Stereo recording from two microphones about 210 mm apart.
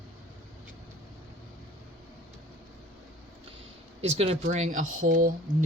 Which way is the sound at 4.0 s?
30° right (ahead or behind).